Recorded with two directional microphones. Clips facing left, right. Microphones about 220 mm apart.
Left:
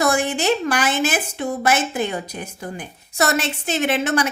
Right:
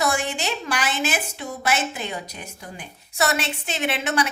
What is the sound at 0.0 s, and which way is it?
A woman's voice, 50° left (ahead or behind).